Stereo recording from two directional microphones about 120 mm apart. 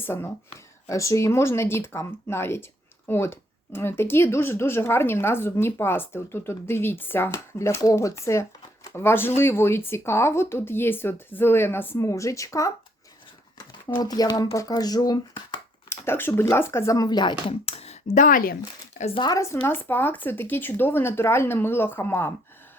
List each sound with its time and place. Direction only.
0.0 s speech: 20° left (ahead or behind)
13.9 s speech: 35° left (ahead or behind)
15.9 s speech: 20° left (ahead or behind); by 17.3 s 35° left (ahead or behind)
17.4 s speech: 55° left (ahead or behind); by 18.3 s 75° left (ahead or behind)
19.1 s speech: 35° left (ahead or behind)
19.6 s speech: 15° left (ahead or behind)